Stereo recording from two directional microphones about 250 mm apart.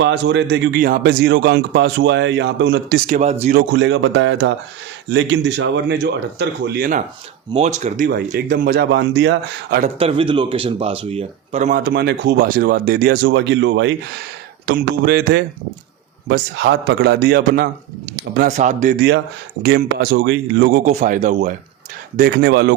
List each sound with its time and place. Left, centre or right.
0.0 s a man's voice: right
3.2 s speech: right
3.7 s a man's voice: right
7.5 s speech: right
9.8 s speech: right